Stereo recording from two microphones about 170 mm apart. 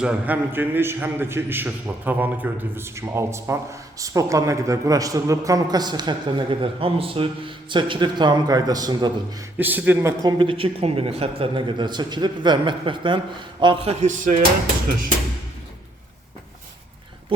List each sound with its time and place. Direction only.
0.0 s a man's voice: 10° right (ahead or behind)
9.6 s speech: 10° right (ahead or behind)
10.3 s a man's voice: 30° right (ahead or behind)
14.0 s speech: 50° right (ahead or behind)